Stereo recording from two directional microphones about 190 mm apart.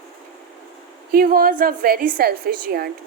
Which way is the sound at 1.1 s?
50° right (ahead or behind).